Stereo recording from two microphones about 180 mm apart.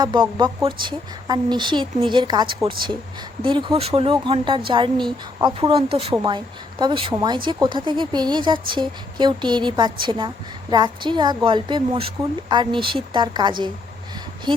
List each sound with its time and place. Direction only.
0.0 s speech: 25° right (ahead or behind)